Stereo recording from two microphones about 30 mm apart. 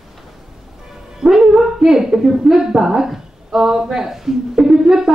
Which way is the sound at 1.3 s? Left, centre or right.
Centre.